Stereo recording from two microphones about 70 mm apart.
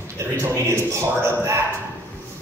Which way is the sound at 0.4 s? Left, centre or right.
Right.